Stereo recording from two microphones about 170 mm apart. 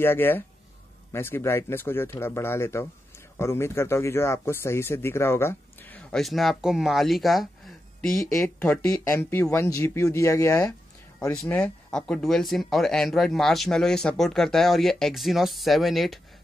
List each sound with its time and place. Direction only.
0.0 s speech: 15° left (ahead or behind)
8.8 s speech: 20° left (ahead or behind); by 16.2 s centre (ahead or behind)